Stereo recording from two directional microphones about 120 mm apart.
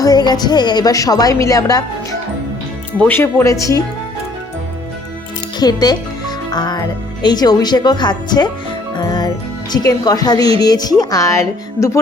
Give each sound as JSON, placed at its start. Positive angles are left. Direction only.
{"t": 0.0, "sound": "speech", "side_deg": 35}
{"t": 3.0, "sound": "speech", "side_deg": 15}
{"t": 5.5, "sound": "speech", "side_deg": 35}
{"t": 9.0, "sound": "music", "side_deg": 35}
{"t": 9.7, "sound": "speech", "side_deg": 35}